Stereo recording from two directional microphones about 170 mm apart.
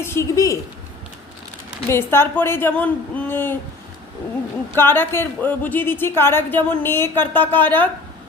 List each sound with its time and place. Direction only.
0.0 s a woman's voice: 15° left (ahead or behind)
1.9 s a woman's voice: 15° left (ahead or behind)
4.7 s a woman's voice: 15° left (ahead or behind)